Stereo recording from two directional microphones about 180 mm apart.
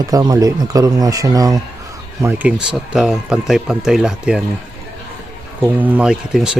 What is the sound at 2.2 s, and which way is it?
Speech, 10° right (ahead or behind).